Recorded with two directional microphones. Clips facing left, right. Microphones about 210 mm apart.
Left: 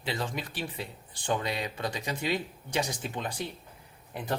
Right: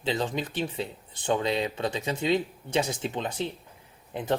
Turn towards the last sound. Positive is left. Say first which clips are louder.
# right 5 dB
turn(degrees=-20)  # may be behind; listen again after turning